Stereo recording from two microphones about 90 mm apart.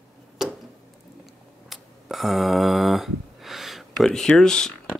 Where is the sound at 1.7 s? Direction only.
Centre (ahead or behind).